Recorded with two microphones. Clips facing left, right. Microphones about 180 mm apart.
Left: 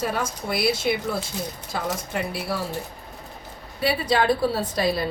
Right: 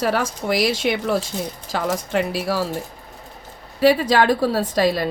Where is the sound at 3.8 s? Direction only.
90° right.